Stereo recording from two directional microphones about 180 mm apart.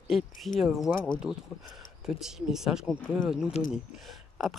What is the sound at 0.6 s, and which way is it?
Speech, centre (ahead or behind).